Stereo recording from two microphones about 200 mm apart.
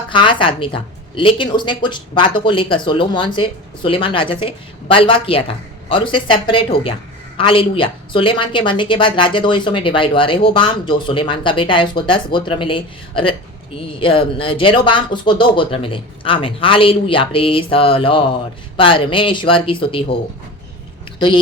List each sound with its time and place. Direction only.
0.1 s a woman's voice: 25° left (ahead or behind)